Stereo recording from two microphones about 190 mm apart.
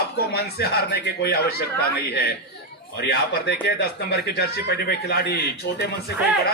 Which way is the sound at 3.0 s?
55° left (ahead or behind).